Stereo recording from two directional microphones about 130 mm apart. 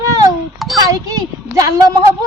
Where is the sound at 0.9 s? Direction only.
30° right (ahead or behind).